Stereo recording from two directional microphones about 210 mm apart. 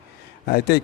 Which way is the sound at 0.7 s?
50° left (ahead or behind).